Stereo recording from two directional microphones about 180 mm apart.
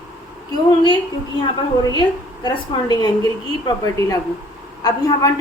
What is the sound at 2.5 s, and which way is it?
A woman's voice, 20° left (ahead or behind).